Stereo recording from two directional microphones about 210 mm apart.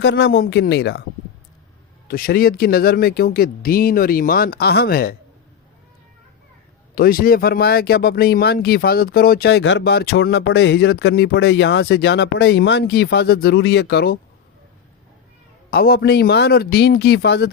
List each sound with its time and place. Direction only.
0.0 s speech: 55° left (ahead or behind)
2.0 s speech: 45° left (ahead or behind)
6.9 s speech: 45° left (ahead or behind)
15.7 s speech: 45° left (ahead or behind)